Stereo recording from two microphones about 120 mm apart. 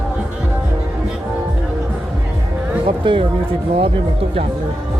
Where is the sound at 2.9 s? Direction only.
45° right (ahead or behind).